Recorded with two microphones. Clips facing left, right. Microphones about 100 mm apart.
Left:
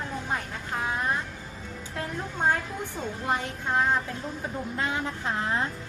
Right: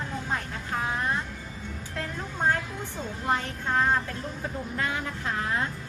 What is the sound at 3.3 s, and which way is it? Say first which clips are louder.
A woman's voice: right 1 dB; 15° left (ahead or behind).